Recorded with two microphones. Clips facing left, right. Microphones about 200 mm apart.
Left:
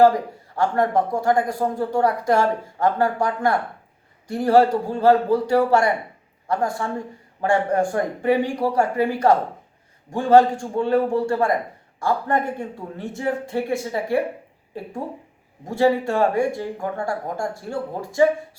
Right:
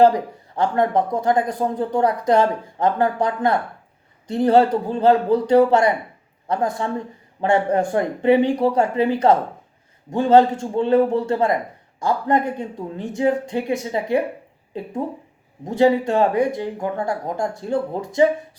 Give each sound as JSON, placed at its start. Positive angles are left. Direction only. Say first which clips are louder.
{"t": 0.0, "sound": "a man's voice", "louder": "right 1 dB", "side_deg": -20}